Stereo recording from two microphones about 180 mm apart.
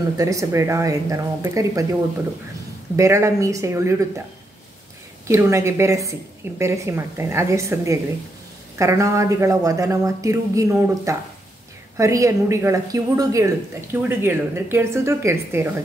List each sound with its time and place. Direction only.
0.2 s speech: 20° right (ahead or behind)
3.0 s speech: 15° right (ahead or behind)
5.3 s speech: 15° right (ahead or behind)